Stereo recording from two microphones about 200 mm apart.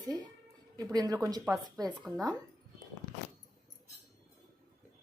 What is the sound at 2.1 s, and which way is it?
Speech, centre (ahead or behind).